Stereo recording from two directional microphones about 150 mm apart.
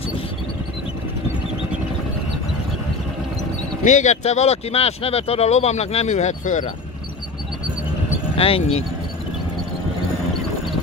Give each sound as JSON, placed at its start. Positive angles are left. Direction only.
{"t": 3.8, "sound": "speech", "side_deg": 55}
{"t": 8.4, "sound": "speech", "side_deg": 40}